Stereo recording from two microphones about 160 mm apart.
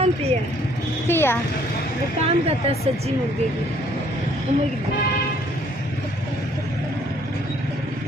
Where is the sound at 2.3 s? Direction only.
40° right (ahead or behind).